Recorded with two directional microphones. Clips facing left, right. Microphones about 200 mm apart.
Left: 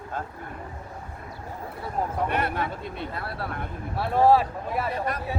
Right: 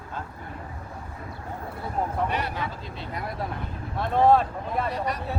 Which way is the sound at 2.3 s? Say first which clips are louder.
Left 3 dB; 55° left (ahead or behind).